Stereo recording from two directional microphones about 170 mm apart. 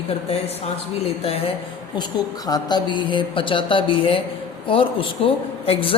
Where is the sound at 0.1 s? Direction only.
35° left (ahead or behind).